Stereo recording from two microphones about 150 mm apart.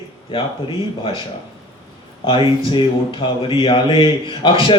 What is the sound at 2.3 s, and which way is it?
A man's voice, 35° left (ahead or behind).